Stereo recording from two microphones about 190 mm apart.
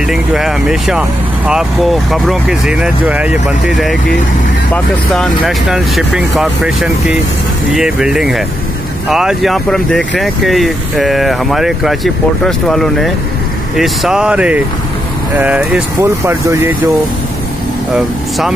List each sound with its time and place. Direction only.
0.1 s speech: centre (ahead or behind)